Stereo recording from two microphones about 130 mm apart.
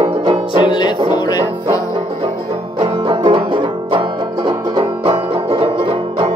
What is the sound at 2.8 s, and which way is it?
Banjo, 40° right (ahead or behind).